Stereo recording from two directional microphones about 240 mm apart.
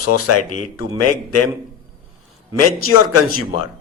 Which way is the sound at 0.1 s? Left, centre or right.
Left.